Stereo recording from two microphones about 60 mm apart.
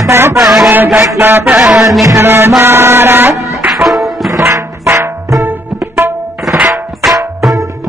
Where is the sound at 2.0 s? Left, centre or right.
Right.